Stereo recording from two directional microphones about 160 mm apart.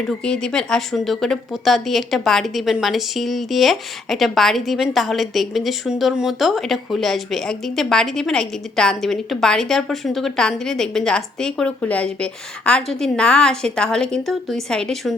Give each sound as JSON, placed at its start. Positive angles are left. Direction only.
{"t": 0.3, "sound": "speech", "side_deg": 5}